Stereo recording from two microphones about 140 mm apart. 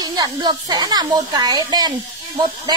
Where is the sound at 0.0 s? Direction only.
30° right (ahead or behind).